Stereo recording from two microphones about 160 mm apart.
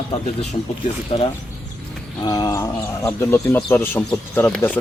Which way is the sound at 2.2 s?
25° left (ahead or behind).